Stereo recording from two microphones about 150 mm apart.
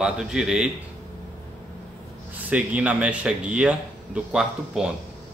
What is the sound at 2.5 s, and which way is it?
Speech, 10° right (ahead or behind).